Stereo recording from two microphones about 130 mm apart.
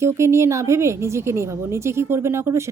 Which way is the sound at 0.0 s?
20° right (ahead or behind).